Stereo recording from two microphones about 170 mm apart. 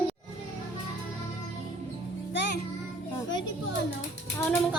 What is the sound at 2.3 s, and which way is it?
Music, 90° left.